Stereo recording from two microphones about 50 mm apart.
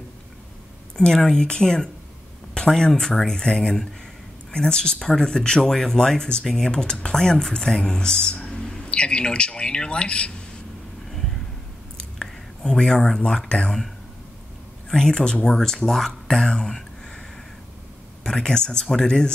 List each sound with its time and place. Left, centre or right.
0.9 s speech: centre
11.1 s a sound: centre
12.2 s speech: centre
14.9 s speech: centre
18.2 s speech: centre